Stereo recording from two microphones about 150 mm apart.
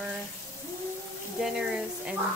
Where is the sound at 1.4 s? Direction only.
5° right (ahead or behind).